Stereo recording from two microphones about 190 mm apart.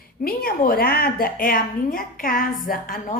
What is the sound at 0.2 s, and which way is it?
A woman's voice, 50° left (ahead or behind).